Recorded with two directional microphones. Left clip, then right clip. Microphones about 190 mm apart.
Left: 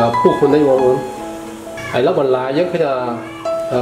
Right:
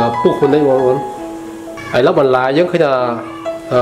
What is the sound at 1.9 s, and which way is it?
Speech, 30° right (ahead or behind).